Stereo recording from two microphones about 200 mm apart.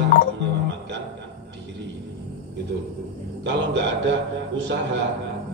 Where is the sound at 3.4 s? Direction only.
60° right (ahead or behind).